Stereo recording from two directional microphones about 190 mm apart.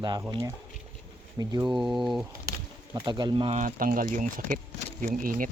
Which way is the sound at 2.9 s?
25° right (ahead or behind).